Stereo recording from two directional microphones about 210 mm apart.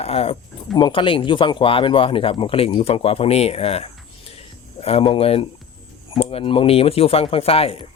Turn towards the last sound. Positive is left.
turn(degrees=30)  # may be behind; listen again after turning